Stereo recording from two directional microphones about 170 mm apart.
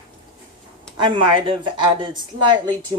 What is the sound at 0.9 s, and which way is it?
A woman's voice, 30° right (ahead or behind).